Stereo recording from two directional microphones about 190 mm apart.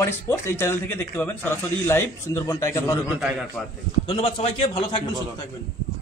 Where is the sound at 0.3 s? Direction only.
15° left (ahead or behind).